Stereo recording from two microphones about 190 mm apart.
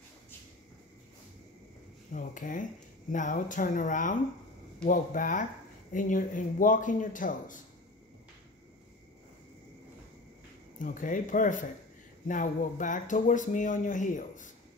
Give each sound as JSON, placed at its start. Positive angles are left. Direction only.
{"t": 2.1, "sound": "speech", "side_deg": 45}
{"t": 10.8, "sound": "speech", "side_deg": 45}